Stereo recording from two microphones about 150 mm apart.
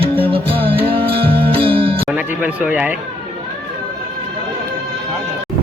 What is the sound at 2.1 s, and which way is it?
Speech, 10° right (ahead or behind).